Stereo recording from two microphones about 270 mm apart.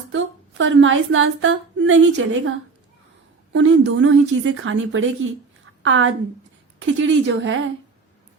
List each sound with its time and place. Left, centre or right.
0.1 s a woman's voice: right